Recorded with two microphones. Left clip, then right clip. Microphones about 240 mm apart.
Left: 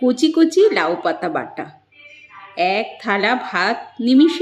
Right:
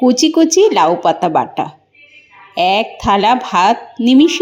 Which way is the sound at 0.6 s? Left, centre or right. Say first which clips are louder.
Right 5 dB; right.